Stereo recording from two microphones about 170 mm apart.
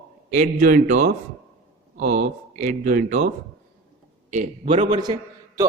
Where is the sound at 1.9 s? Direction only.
90° right.